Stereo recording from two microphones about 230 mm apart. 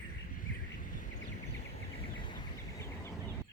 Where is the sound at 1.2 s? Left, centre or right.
Left.